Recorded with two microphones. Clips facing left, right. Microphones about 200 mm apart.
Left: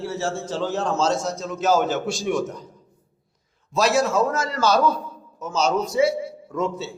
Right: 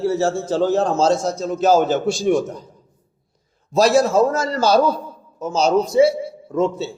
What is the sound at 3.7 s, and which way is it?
A man's voice, 35° right (ahead or behind).